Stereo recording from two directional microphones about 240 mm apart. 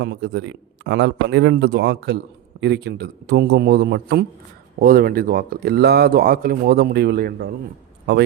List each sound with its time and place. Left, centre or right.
0.0 s speech: right